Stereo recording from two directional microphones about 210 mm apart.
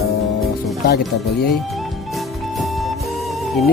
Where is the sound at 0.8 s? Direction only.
50° left (ahead or behind).